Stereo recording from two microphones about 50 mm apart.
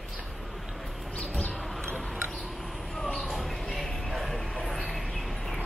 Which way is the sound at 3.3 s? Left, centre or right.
Centre.